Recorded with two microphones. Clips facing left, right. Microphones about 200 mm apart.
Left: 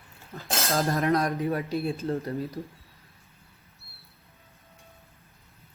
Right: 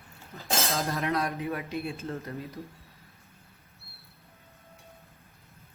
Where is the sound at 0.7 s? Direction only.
50° left (ahead or behind).